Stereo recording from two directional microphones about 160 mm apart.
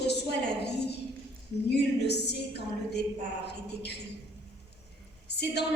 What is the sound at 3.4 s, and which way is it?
Speech, 90° left.